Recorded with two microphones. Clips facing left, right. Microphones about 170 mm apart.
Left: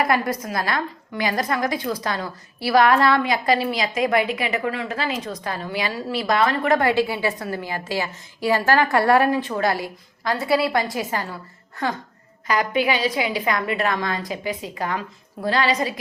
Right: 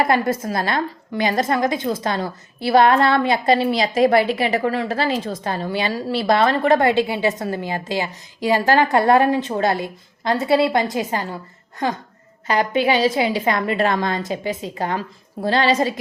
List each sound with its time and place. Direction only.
0.0 s a woman's voice: 25° right (ahead or behind)
12.5 s a woman's voice: 30° right (ahead or behind)